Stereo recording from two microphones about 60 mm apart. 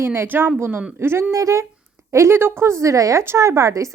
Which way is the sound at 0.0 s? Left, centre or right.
Right.